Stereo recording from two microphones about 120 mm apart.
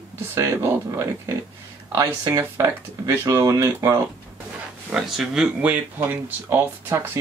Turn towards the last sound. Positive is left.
turn(degrees=-20)  # may be behind; listen again after turning